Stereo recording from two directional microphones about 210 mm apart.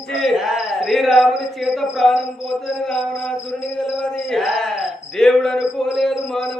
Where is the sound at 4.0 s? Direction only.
Centre (ahead or behind).